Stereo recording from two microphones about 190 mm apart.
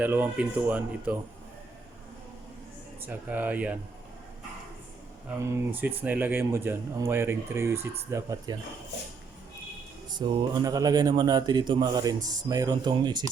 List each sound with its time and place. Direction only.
0.0 s speech: 10° right (ahead or behind)
3.0 s speech: 10° right (ahead or behind)
5.4 s speech: 15° right (ahead or behind)
10.2 s speech: 25° right (ahead or behind)